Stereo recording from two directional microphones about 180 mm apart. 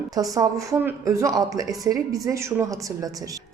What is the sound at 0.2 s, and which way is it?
A woman's voice, 20° right (ahead or behind).